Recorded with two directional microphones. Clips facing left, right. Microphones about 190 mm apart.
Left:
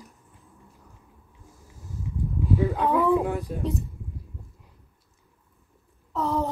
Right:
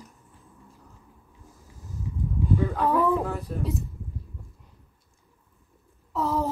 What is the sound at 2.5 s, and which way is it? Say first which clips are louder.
Speech: left 1 dB; 10° left (ahead or behind).